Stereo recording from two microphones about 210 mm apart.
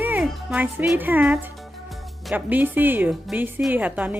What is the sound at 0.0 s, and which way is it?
Speech, 5° right (ahead or behind).